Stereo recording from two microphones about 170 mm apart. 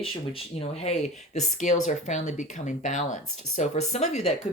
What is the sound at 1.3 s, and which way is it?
Speech, 45° left (ahead or behind).